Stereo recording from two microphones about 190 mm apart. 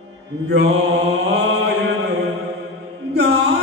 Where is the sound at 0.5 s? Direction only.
90° right; by 1.7 s 75° right (ahead or behind).